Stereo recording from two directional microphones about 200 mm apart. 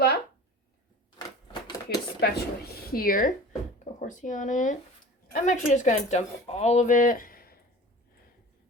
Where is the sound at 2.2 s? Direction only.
50° left (ahead or behind).